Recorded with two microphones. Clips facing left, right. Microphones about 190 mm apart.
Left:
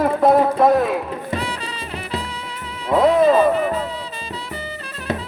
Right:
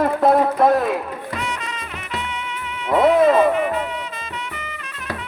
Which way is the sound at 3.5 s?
35° left (ahead or behind).